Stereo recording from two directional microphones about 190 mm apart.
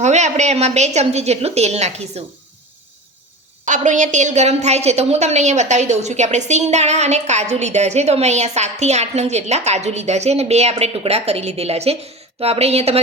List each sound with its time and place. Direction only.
0.0 s a woman's voice: 35° right (ahead or behind)
3.7 s a woman's voice: 40° right (ahead or behind)